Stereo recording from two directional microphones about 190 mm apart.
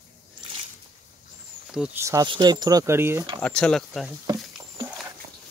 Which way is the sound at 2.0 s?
20° right (ahead or behind).